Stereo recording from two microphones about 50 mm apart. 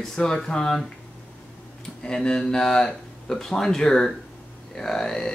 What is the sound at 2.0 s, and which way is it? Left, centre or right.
Speech, centre.